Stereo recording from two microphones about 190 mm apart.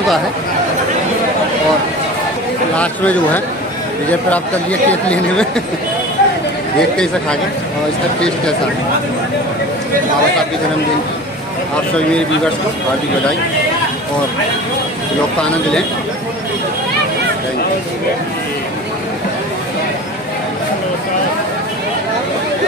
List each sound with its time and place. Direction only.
2.7 s speech: 5° left (ahead or behind)